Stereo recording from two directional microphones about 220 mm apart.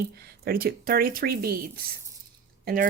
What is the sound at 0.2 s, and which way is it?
Speech, 45° right (ahead or behind).